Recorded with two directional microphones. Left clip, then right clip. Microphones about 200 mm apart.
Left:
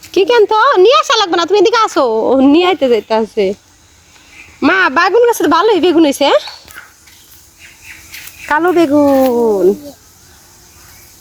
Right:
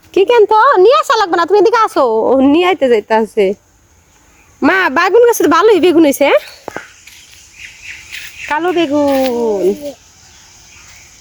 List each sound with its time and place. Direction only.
0.1 s speech: 10° right (ahead or behind)
4.6 s speech: 15° right (ahead or behind)
6.2 s speech: 15° right (ahead or behind)
8.4 s speech: centre (ahead or behind)